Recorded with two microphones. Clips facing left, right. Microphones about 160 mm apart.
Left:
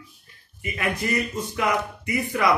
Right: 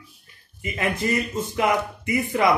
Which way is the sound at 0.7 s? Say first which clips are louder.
Right 2 dB; 25° right (ahead or behind).